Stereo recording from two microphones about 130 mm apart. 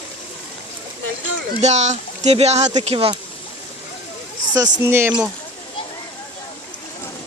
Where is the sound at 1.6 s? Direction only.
60° right (ahead or behind).